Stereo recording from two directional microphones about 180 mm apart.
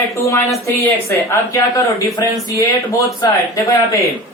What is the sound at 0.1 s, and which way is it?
Speech, 15° left (ahead or behind).